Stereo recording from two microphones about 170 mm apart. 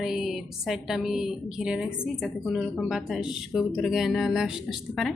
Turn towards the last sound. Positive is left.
turn(degrees=0)  # may be behind; listen again after turning